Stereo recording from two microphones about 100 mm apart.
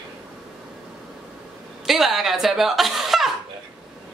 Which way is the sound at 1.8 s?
Centre (ahead or behind).